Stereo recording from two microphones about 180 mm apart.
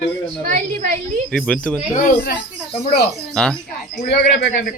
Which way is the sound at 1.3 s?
5° left (ahead or behind).